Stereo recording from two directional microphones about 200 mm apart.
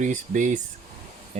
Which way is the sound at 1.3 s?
35° right (ahead or behind).